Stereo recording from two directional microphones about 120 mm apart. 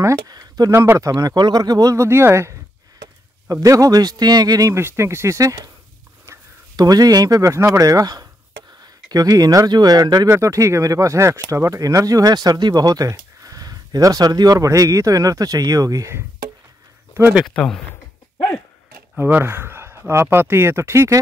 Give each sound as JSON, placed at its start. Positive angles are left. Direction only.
{"t": 0.0, "sound": "speech", "side_deg": -30}
{"t": 0.7, "sound": "speech", "side_deg": -25}
{"t": 3.6, "sound": "speech", "side_deg": -30}
{"t": 6.8, "sound": "speech", "side_deg": -30}
{"t": 17.6, "sound": "speech", "side_deg": 5}
{"t": 19.1, "sound": "speech", "side_deg": -15}